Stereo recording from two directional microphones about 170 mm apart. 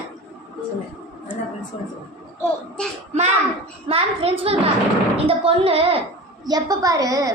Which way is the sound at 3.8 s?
35° right (ahead or behind).